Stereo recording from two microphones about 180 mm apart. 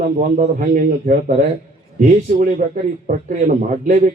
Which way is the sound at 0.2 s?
45° right (ahead or behind).